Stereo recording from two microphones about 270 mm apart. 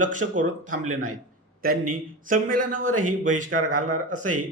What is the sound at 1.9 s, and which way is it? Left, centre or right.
A man's voice, right.